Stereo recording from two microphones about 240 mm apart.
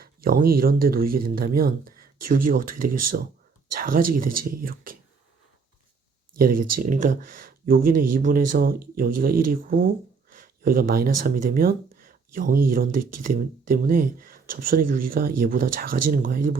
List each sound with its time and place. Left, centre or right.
0.0 s speech: right
2.8 s speech: right
4.1 s speech: right
6.3 s speech: right